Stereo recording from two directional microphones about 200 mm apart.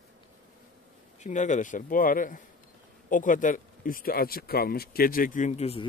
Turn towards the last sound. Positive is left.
turn(degrees=30)  # may be behind; listen again after turning